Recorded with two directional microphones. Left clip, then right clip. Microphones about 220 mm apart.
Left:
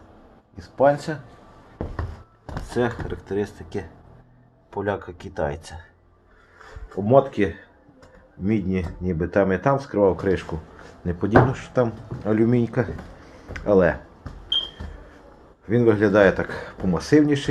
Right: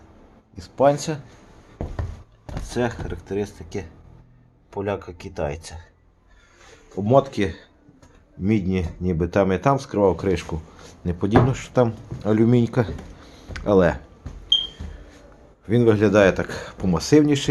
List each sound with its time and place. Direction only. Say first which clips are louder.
0.5 s speech: even; 15° right (ahead or behind)
2.5 s speech: left 1 dB; 5° right (ahead or behind)
6.9 s speech: left 1 dB; 10° right (ahead or behind)
8.4 s speech: right 1 dB; 30° right (ahead or behind)
9.4 s speech: even; 15° right (ahead or behind)
11.7 s speech: right 2 dB; 30° right (ahead or behind)
12.2 s speech: right 1 dB; 20° right (ahead or behind)
15.6 s speech: right 1 dB; 15° right (ahead or behind)
17.0 s speech: right 1 dB; 30° right (ahead or behind)